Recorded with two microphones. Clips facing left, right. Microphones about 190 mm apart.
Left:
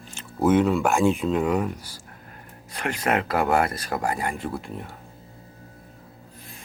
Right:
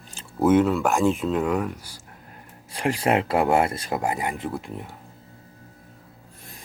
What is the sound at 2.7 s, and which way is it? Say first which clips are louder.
Speech: right 3 dB; 30° right (ahead or behind).